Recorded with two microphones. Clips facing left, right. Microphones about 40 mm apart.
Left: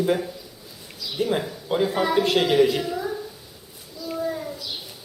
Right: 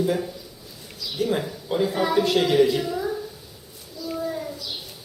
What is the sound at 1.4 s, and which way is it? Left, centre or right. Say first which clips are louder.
A woman's voice: left 1 dB; centre.